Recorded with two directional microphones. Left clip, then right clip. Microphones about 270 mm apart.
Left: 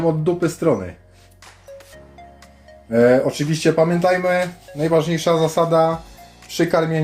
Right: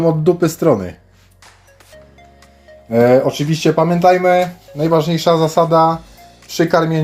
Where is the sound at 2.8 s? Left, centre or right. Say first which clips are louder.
Right 3 dB; centre.